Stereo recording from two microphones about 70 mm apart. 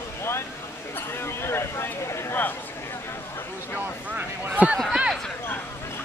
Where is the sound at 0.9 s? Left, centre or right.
Left.